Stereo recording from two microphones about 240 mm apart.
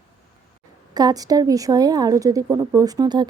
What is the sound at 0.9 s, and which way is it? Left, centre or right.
Speech, centre.